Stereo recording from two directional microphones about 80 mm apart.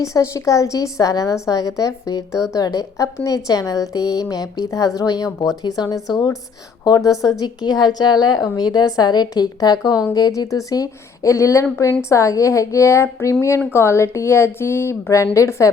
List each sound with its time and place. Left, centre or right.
0.0 s a woman's voice: left
7.4 s a woman's voice: left